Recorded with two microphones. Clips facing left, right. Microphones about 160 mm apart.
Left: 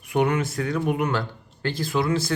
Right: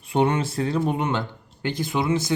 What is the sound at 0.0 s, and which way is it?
Speech, 30° right (ahead or behind).